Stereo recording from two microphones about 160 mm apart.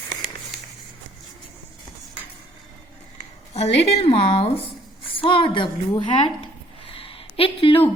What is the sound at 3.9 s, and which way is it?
A woman's voice, 35° left (ahead or behind).